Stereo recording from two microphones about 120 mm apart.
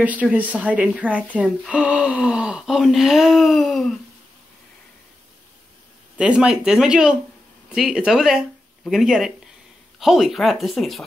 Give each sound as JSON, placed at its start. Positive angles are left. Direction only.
{"t": 0.0, "sound": "speech", "side_deg": -10}
{"t": 6.1, "sound": "speech", "side_deg": -10}